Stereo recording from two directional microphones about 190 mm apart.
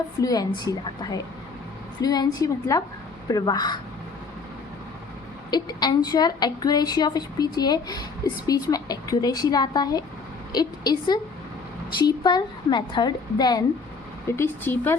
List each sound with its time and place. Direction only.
0.2 s a woman's voice: 20° left (ahead or behind)
5.5 s a woman's voice: 20° left (ahead or behind)